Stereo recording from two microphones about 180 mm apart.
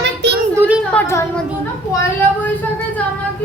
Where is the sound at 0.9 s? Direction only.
15° left (ahead or behind).